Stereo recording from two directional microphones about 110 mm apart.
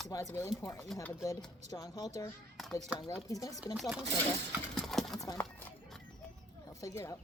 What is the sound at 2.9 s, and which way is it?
Speech, 30° left (ahead or behind).